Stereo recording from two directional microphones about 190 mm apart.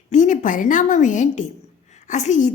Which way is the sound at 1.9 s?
40° left (ahead or behind).